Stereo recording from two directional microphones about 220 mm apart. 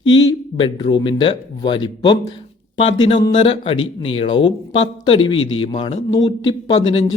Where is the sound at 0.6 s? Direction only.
20° left (ahead or behind).